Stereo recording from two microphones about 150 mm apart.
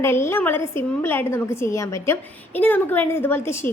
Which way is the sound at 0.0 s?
15° left (ahead or behind).